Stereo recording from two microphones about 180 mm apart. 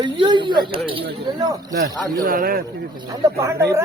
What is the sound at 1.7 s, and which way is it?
Speech, 60° right (ahead or behind).